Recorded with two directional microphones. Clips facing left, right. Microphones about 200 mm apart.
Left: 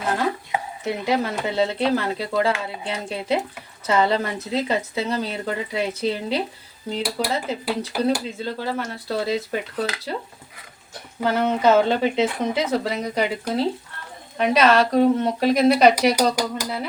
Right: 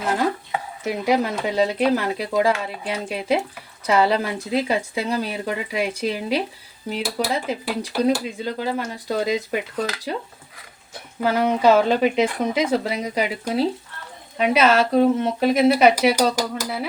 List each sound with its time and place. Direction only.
0.9 s speech: 10° right (ahead or behind)
11.2 s speech: 10° right (ahead or behind)